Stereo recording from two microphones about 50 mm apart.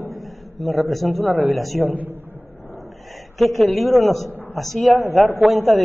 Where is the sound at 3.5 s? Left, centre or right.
Centre.